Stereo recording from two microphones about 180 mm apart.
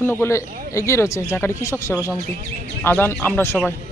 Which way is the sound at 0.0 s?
15° left (ahead or behind).